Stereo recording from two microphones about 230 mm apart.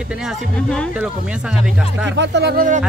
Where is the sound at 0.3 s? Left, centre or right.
Centre.